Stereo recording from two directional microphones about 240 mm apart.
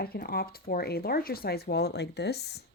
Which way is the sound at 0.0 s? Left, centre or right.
Left.